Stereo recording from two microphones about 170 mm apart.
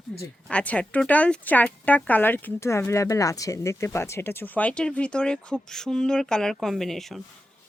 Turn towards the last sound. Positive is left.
turn(degrees=0)  # may be behind; listen again after turning